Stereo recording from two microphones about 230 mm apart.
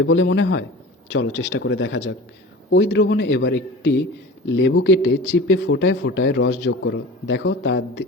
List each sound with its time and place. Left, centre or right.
0.0 s a man's voice: left